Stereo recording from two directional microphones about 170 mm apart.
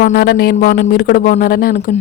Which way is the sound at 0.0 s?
60° left (ahead or behind).